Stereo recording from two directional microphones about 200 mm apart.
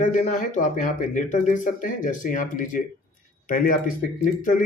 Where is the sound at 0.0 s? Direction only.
35° left (ahead or behind).